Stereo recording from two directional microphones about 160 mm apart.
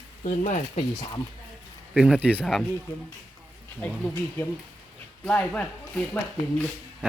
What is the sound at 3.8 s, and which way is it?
Speech, 10° left (ahead or behind).